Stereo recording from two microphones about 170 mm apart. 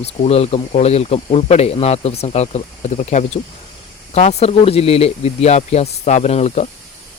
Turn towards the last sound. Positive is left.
turn(degrees=40)  # may be behind; listen again after turning